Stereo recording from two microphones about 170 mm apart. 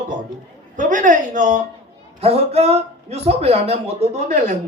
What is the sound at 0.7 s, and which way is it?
Speech, 50° right (ahead or behind).